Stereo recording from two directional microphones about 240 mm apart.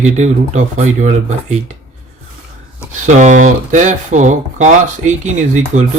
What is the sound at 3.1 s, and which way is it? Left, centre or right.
Speech, right.